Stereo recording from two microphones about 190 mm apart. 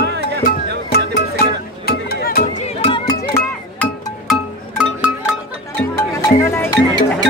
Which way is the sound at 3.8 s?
Centre (ahead or behind).